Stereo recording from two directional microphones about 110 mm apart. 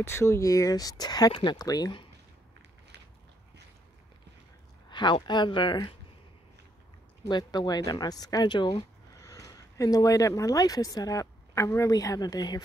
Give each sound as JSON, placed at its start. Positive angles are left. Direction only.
{"t": 0.0, "sound": "speech", "side_deg": 25}
{"t": 4.8, "sound": "speech", "side_deg": 45}
{"t": 7.2, "sound": "speech", "side_deg": 40}
{"t": 9.2, "sound": "speech", "side_deg": 30}